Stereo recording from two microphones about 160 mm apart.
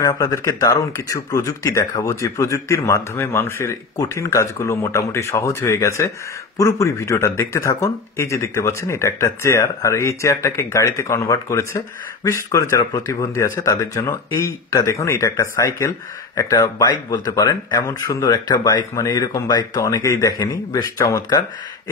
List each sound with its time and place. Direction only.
0.0 s speech: 20° left (ahead or behind)